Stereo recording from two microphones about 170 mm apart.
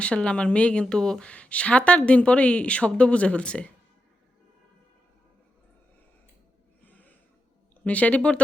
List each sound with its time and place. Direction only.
0.0 s speech: 5° left (ahead or behind)
7.9 s speech: 10° left (ahead or behind)